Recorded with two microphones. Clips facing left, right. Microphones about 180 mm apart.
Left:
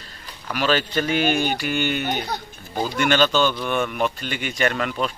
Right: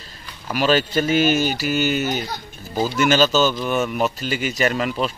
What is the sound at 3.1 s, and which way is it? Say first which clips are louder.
Speech: right 1 dB; 5° right (ahead or behind).